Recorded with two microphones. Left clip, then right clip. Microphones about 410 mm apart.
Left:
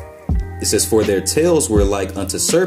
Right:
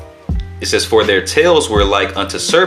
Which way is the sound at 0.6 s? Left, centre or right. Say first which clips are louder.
Right 4 dB; left.